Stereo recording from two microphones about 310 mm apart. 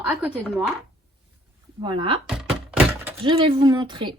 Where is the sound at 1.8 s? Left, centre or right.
Centre.